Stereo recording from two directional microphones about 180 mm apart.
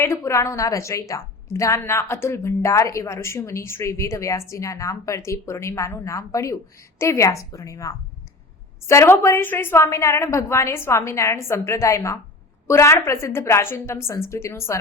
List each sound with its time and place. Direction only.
0.0 s a woman's voice: 15° left (ahead or behind)